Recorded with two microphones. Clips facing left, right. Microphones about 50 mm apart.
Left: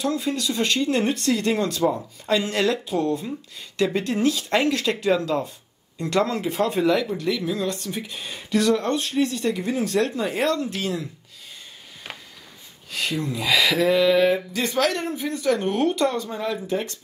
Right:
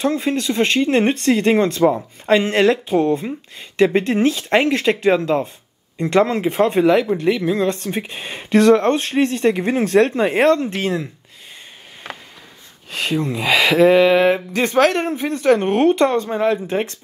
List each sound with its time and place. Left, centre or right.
0.0 s speech: right
12.9 s speech: right